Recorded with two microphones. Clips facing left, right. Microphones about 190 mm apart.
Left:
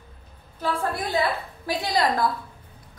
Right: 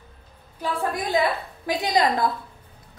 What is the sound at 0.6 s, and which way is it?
A woman's voice, 15° right (ahead or behind).